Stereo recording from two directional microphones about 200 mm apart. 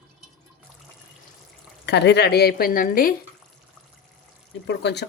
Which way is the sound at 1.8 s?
60° left (ahead or behind).